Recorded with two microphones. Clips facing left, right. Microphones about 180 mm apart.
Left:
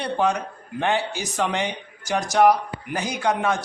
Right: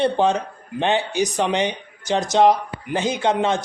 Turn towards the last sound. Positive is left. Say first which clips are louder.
# right 3 dB
turn(degrees=-25)  # may be behind; listen again after turning